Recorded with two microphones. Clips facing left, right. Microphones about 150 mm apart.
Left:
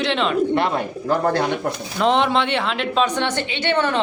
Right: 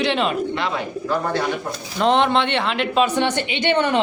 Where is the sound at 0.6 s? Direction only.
50° left (ahead or behind).